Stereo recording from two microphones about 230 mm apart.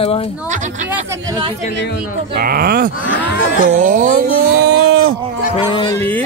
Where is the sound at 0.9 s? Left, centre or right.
Centre.